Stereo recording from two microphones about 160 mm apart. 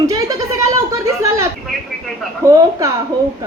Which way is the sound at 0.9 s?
20° right (ahead or behind).